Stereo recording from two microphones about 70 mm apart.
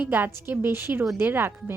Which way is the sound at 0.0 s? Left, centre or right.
Right.